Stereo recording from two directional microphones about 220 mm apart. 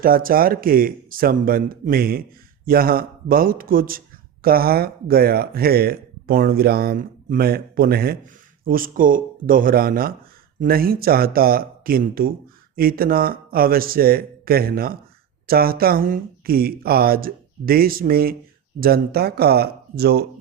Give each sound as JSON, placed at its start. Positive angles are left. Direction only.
{"t": 0.0, "sound": "speech", "side_deg": -40}